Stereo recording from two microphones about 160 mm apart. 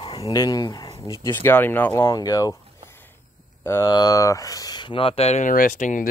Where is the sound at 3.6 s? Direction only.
15° left (ahead or behind); by 6.1 s 55° left (ahead or behind).